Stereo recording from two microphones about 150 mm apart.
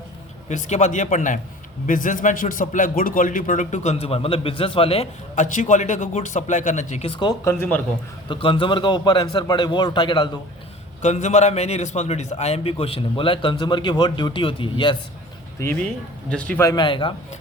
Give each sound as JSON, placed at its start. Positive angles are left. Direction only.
{"t": 0.4, "sound": "speech", "side_deg": 50}
{"t": 7.1, "sound": "a man's voice", "side_deg": 30}
{"t": 7.4, "sound": "a man's voice", "side_deg": 15}
{"t": 8.3, "sound": "a man's voice", "side_deg": 35}
{"t": 11.0, "sound": "a man's voice", "side_deg": 50}
{"t": 16.3, "sound": "a man's voice", "side_deg": 10}
{"t": 16.6, "sound": "a man's voice", "side_deg": 30}